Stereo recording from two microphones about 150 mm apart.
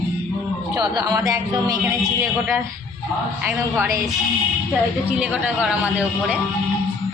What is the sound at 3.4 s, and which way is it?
Speech, 15° right (ahead or behind).